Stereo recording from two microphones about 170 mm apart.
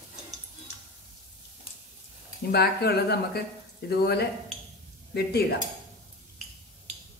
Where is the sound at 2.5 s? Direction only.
70° left (ahead or behind).